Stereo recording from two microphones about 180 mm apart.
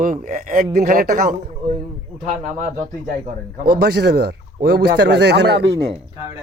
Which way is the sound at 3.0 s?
50° right (ahead or behind).